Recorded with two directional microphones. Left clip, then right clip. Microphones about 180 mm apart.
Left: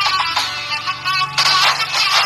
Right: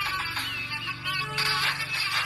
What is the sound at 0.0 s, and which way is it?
Music, 50° left (ahead or behind).